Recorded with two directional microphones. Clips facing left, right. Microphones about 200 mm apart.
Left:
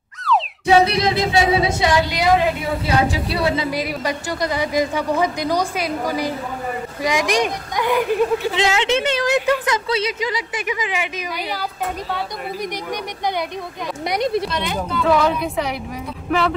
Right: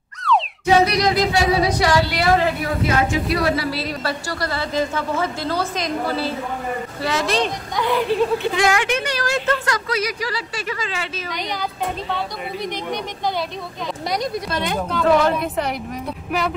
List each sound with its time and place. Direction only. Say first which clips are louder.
0.2 s music: even; centre (ahead or behind)
0.8 s speech: right 1 dB; 25° left (ahead or behind)
2.8 s a woman's voice: even; 30° left (ahead or behind)
14.0 s speech: left 4 dB; 25° left (ahead or behind)
14.9 s a woman's voice: right 1 dB; centre (ahead or behind)